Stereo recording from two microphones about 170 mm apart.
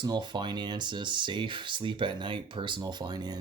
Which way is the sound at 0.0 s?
25° right (ahead or behind).